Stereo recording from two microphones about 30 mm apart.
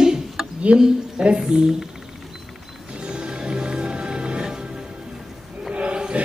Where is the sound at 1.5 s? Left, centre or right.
Right.